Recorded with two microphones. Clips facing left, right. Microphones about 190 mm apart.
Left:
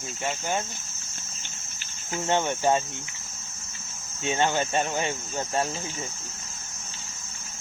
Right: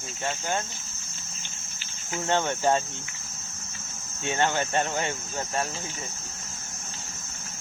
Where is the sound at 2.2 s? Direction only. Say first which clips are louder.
Left 1 dB; 15° left (ahead or behind).